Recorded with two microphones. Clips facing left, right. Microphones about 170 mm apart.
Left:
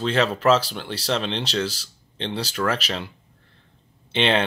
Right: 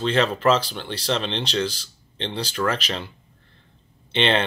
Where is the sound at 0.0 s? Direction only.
5° left (ahead or behind).